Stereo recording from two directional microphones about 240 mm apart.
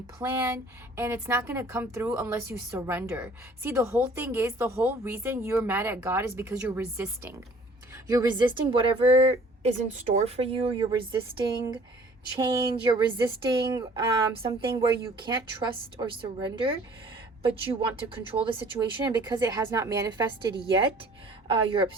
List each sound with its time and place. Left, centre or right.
0.2 s a woman's voice: centre